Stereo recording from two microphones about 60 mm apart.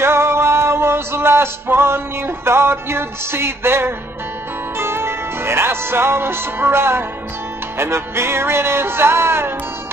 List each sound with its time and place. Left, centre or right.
0.0 s music: right